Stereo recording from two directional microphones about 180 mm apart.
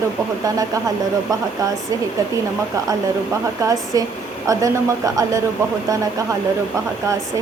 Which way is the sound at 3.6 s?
20° right (ahead or behind).